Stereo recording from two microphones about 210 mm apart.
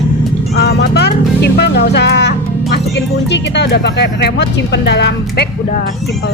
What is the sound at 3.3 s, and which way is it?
A woman's voice, 55° left (ahead or behind).